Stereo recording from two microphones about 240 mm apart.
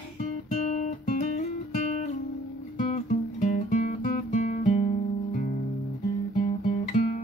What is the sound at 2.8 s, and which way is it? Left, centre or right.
Music, left.